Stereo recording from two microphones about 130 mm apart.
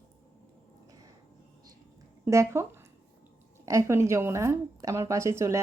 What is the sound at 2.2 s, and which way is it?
A woman's voice, 20° right (ahead or behind).